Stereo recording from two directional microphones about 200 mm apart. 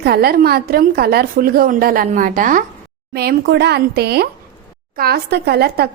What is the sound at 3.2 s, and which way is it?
A woman's voice, 55° right (ahead or behind).